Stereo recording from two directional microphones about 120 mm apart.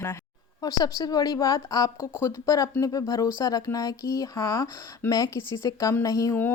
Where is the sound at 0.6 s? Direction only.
30° left (ahead or behind).